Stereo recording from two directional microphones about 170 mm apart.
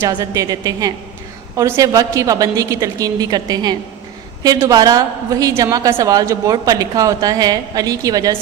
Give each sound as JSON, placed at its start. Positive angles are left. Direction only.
{"t": 0.0, "sound": "a woman's voice", "side_deg": -20}